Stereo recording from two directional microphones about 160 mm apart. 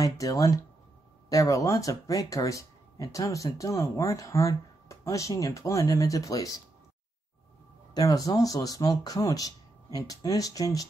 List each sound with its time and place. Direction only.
0.0 s speech: 20° left (ahead or behind)
7.9 s speech: 25° left (ahead or behind)